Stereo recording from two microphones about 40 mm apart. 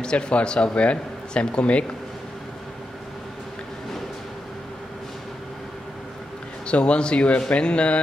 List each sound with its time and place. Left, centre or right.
0.0 s speech: left
6.7 s speech: left